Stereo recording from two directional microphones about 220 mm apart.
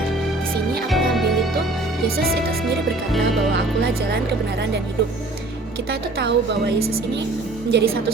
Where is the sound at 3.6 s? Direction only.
50° right (ahead or behind).